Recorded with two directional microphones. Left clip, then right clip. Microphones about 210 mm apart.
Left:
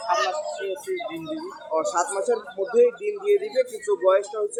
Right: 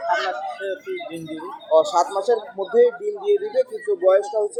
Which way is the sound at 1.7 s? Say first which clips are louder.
Right 7 dB; 25° right (ahead or behind).